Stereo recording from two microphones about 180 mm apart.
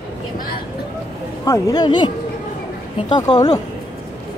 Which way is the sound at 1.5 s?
20° left (ahead or behind).